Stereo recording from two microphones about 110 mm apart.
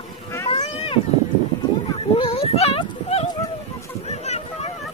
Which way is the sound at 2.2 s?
60° left (ahead or behind).